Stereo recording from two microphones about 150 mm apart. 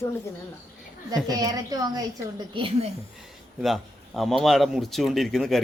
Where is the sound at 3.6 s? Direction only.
Centre (ahead or behind).